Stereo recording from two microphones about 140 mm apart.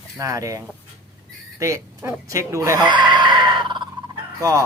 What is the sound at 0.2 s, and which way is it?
Speech, 25° right (ahead or behind).